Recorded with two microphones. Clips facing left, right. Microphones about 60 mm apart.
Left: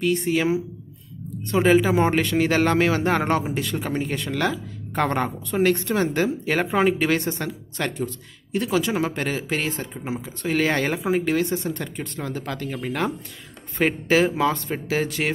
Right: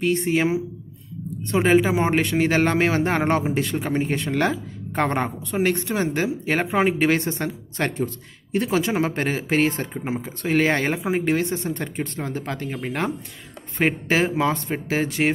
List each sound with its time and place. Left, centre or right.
0.0 s speech: right
1.6 s speech: right